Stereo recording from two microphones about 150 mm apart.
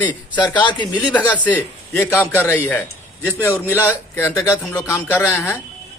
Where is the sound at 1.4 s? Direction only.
15° left (ahead or behind).